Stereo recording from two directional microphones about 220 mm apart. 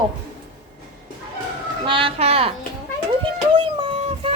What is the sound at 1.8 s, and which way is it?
Speech, 25° right (ahead or behind).